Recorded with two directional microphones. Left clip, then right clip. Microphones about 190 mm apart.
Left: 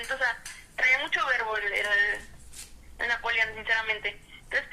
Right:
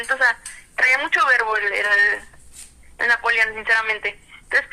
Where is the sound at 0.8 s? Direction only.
25° right (ahead or behind).